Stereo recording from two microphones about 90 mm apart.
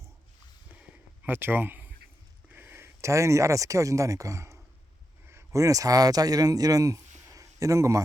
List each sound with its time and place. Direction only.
1.2 s speech: 25° right (ahead or behind)